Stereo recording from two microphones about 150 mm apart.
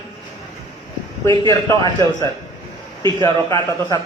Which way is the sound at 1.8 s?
25° left (ahead or behind).